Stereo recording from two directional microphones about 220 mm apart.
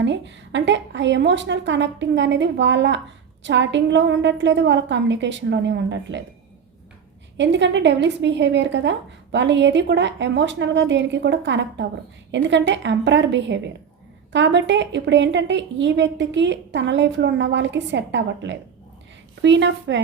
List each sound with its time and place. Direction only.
0.0 s a woman's voice: 55° right (ahead or behind)
7.3 s a woman's voice: 55° right (ahead or behind)